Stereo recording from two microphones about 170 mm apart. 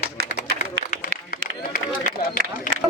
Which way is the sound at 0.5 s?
60° left (ahead or behind).